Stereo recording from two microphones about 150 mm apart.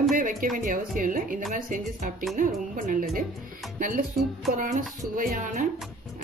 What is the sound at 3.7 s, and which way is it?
Music, 65° right (ahead or behind).